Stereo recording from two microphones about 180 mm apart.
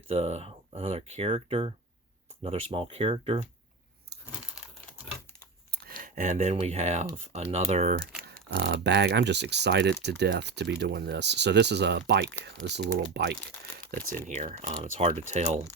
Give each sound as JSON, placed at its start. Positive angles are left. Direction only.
{"t": 0.1, "sound": "speech", "side_deg": -35}
{"t": 4.3, "sound": "crumpling", "side_deg": -5}
{"t": 5.7, "sound": "speech", "side_deg": -55}
{"t": 8.4, "sound": "speech", "side_deg": -70}
{"t": 14.3, "sound": "speech", "side_deg": -40}